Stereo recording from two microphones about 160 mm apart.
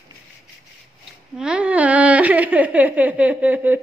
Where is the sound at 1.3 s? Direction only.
5° right (ahead or behind).